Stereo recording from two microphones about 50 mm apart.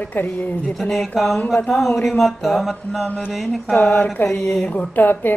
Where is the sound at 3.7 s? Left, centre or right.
Left.